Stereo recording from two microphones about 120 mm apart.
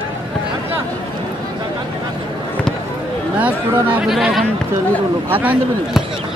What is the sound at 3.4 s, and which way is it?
Speech, 10° right (ahead or behind).